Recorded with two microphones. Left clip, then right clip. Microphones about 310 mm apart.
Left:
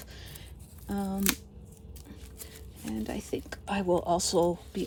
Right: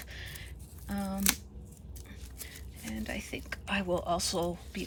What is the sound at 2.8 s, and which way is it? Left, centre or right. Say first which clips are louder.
Speech: left 2 dB; centre.